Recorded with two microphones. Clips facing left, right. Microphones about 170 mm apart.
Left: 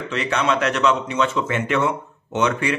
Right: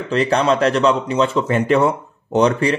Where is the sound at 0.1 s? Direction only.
35° right (ahead or behind).